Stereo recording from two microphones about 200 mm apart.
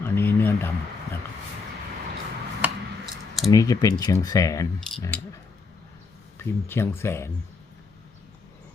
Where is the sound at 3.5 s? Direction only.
15° left (ahead or behind).